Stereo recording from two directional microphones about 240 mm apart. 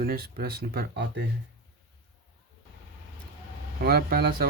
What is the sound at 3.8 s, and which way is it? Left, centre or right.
Speech, right.